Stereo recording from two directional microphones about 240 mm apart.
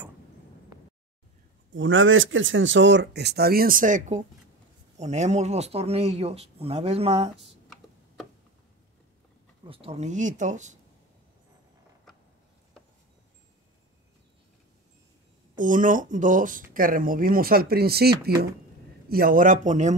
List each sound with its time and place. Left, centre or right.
1.7 s speech: right
9.7 s speech: right
15.6 s speech: right